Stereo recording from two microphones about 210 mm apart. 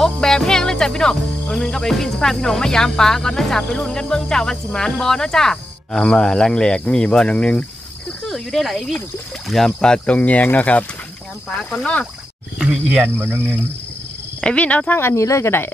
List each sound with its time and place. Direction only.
0.0 s speech: 5° left (ahead or behind)
12.5 s speech: 5° right (ahead or behind)
14.4 s speech: 5° left (ahead or behind)